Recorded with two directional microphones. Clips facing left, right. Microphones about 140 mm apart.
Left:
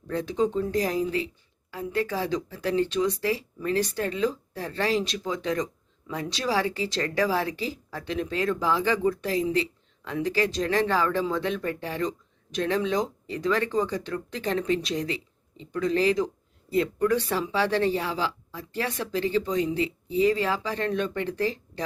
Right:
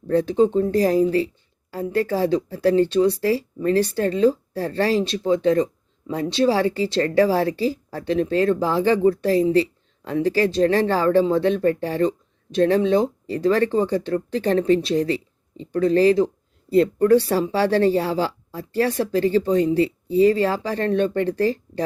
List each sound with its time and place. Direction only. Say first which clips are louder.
0.1 s speech: right 8 dB; 35° right (ahead or behind)